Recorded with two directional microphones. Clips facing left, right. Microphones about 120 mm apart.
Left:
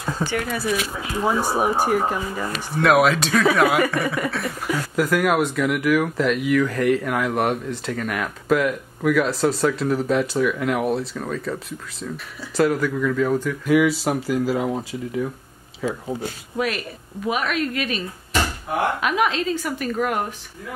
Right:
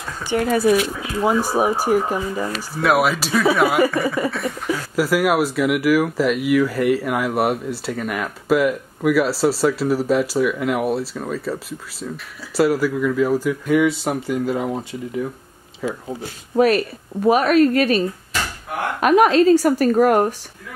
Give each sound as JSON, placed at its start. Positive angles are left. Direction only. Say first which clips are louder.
{"t": 0.4, "sound": "speech", "louder": "right 8 dB", "side_deg": -40}
{"t": 1.6, "sound": "speech", "louder": "right 1 dB", "side_deg": -15}
{"t": 2.5, "sound": "speech", "louder": "left 2 dB", "side_deg": 0}
{"t": 16.5, "sound": "a woman's voice", "louder": "right 10 dB", "side_deg": -35}